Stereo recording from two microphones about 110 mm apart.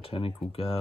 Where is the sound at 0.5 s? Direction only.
60° left (ahead or behind).